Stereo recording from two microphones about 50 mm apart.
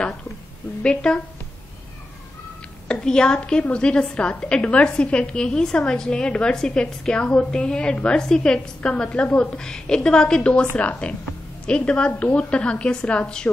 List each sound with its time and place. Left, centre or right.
0.8 s a woman's voice: centre
2.9 s a woman's voice: centre